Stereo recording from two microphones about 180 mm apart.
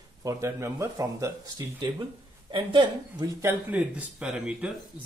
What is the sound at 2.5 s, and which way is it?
Speech, 25° right (ahead or behind).